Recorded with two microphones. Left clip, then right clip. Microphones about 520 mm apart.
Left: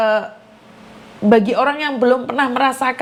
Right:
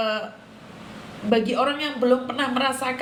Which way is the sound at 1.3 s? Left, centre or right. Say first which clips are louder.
Left 8 dB; left.